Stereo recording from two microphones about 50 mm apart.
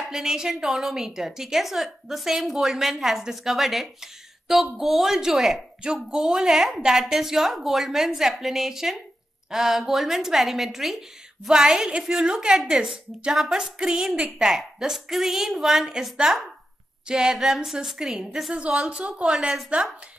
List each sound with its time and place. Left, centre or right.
0.1 s a woman's voice: centre
18.5 s a woman's voice: right